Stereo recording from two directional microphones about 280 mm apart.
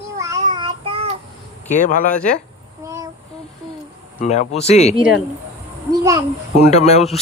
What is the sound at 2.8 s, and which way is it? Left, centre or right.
Child singing, centre.